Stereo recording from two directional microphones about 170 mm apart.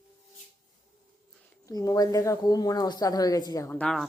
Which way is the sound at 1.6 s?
20° left (ahead or behind).